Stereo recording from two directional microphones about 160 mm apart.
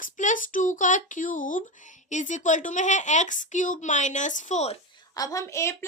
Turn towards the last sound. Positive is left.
turn(degrees=15)  # may be behind; listen again after turning